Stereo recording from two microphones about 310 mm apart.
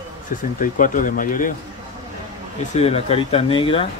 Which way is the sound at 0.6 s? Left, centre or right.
Left.